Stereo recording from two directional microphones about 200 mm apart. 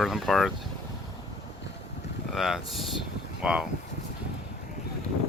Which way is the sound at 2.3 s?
Centre (ahead or behind).